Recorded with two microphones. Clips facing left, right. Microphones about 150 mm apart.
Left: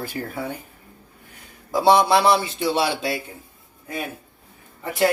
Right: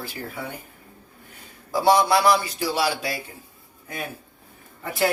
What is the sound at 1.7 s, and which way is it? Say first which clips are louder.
A man's voice: left 2 dB; 25° left (ahead or behind).